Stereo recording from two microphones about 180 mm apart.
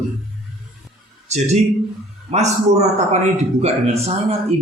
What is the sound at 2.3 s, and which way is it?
Speech, 40° right (ahead or behind).